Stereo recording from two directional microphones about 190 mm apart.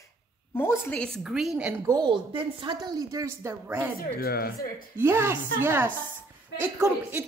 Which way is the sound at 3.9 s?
55° left (ahead or behind).